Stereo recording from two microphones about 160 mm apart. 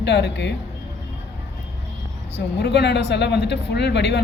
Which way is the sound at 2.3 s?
90° left.